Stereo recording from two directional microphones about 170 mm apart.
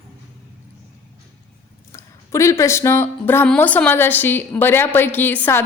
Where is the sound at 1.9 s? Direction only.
15° left (ahead or behind).